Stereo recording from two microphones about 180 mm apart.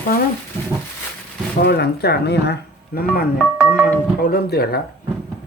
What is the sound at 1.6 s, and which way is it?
Speech, 65° left (ahead or behind).